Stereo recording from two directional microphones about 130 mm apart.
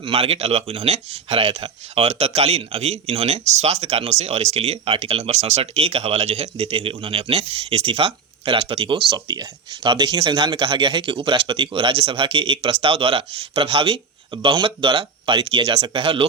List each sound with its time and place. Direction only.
0.0 s speech: 50° right (ahead or behind)